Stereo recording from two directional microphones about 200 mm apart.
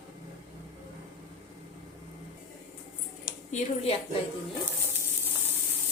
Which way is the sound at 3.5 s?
30° left (ahead or behind).